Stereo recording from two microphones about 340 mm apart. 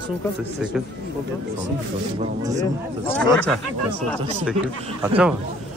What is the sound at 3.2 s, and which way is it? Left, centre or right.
Speech, centre.